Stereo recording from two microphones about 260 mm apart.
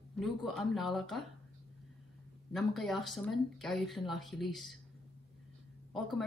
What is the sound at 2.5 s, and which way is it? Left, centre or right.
Speech, centre.